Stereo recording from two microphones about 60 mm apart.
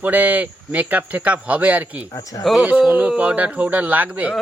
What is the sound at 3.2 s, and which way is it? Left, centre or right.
Speech, right.